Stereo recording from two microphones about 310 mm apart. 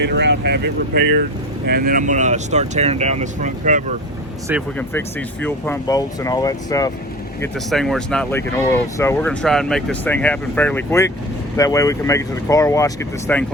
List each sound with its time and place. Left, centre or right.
0.0 s speech: right
4.8 s speech: centre
7.4 s speech: centre